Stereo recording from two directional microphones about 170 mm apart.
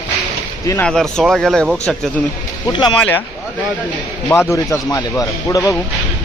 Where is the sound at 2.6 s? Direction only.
25° left (ahead or behind).